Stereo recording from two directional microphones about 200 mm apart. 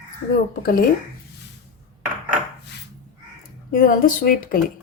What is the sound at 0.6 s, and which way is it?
Speech, 45° left (ahead or behind).